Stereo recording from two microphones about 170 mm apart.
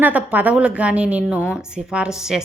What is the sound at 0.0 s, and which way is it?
A woman's voice, 10° right (ahead or behind).